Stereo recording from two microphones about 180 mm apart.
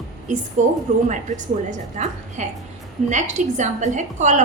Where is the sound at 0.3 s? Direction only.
45° right (ahead or behind).